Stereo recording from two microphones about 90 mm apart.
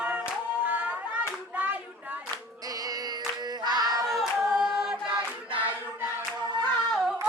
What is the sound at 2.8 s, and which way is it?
Chant, 50° right (ahead or behind).